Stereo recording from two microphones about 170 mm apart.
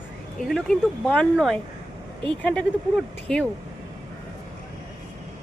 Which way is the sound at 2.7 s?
90° left.